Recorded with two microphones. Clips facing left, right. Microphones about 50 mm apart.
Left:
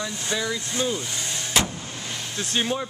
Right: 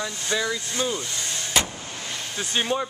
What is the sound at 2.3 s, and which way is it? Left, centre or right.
Speech, centre.